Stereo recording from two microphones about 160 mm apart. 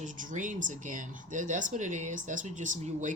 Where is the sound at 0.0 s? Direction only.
55° right (ahead or behind).